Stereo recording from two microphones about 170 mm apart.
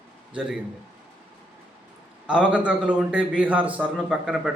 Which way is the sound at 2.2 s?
5° right (ahead or behind).